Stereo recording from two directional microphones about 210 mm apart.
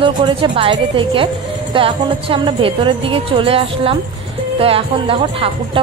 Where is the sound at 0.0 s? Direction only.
25° right (ahead or behind).